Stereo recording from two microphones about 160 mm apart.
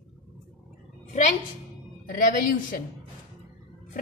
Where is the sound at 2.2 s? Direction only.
60° left (ahead or behind).